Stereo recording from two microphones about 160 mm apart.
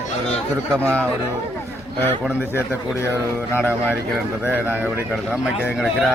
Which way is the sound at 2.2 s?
10° right (ahead or behind).